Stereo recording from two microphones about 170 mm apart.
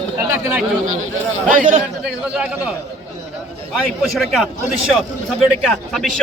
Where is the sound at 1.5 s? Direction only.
50° right (ahead or behind).